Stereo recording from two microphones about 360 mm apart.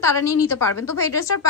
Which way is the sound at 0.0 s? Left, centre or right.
Centre.